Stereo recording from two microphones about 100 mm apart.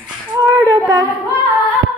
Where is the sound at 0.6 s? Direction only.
50° right (ahead or behind).